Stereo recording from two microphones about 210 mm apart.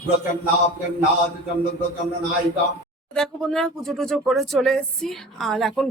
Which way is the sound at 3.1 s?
5° left (ahead or behind).